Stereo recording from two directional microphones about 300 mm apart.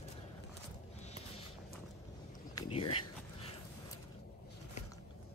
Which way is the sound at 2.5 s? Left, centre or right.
Centre.